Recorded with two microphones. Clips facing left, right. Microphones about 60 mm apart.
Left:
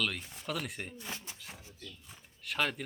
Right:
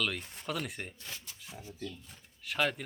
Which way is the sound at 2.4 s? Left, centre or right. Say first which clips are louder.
Right 1 dB; centre.